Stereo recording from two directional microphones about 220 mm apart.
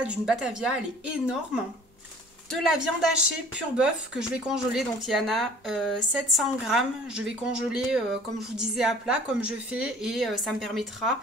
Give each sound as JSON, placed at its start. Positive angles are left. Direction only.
{"t": 0.0, "sound": "speech", "side_deg": -5}